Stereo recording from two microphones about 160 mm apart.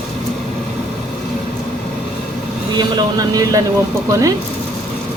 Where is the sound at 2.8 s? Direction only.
25° right (ahead or behind).